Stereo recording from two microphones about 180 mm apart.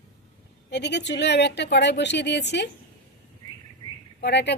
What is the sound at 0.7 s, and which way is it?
Speech, 70° left (ahead or behind).